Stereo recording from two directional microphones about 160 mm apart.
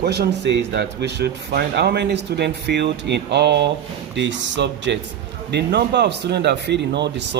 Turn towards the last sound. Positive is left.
turn(degrees=-90)